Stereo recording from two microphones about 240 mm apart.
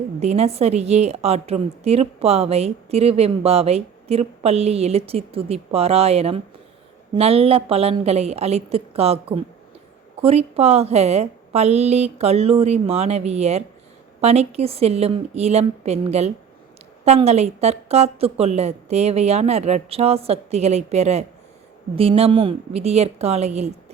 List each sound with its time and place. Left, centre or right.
0.2 s a woman's voice: right